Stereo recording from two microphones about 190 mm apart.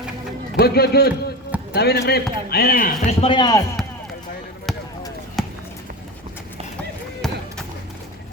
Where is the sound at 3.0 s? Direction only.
30° left (ahead or behind).